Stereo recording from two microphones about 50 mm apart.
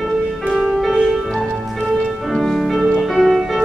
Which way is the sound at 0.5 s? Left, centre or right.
Centre.